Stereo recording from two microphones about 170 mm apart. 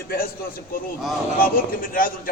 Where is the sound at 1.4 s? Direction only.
55° left (ahead or behind).